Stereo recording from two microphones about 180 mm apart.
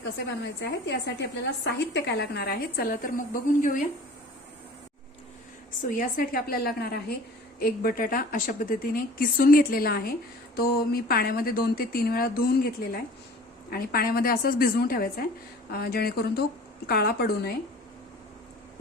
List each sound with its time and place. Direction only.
0.0 s a woman's voice: 70° left (ahead or behind); by 3.8 s 50° left (ahead or behind)
5.9 s a woman's voice: 50° left (ahead or behind)